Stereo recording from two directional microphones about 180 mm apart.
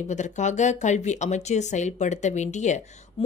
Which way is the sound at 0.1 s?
40° left (ahead or behind).